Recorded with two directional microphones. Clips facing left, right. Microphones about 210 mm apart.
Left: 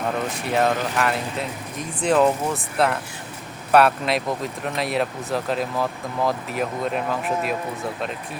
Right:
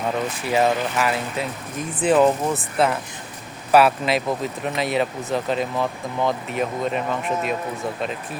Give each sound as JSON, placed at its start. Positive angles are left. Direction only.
{"t": 0.4, "sound": "speech", "side_deg": 0}